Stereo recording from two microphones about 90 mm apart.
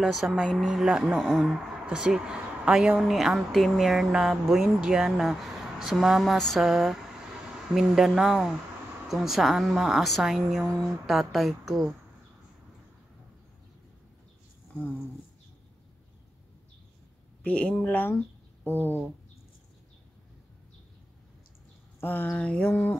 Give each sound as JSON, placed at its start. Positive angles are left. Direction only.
{"t": 0.0, "sound": "speech", "side_deg": 0}
{"t": 0.7, "sound": "speech", "side_deg": -10}
{"t": 17.4, "sound": "speech", "side_deg": 15}
{"t": 22.0, "sound": "speech", "side_deg": 20}
{"t": 22.3, "sound": "a sound", "side_deg": 10}